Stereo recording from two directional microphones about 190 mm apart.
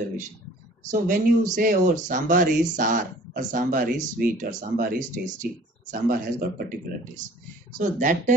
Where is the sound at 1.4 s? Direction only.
40° right (ahead or behind).